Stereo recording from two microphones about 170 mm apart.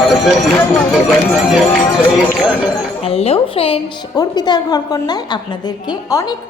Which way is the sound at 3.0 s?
35° left (ahead or behind).